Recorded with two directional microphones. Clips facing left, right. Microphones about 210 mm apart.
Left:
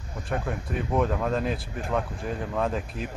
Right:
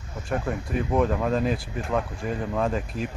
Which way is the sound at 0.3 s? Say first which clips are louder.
Right 3 dB; centre (ahead or behind).